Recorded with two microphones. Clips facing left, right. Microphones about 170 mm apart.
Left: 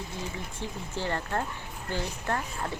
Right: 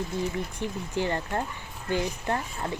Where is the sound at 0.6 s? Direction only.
15° right (ahead or behind).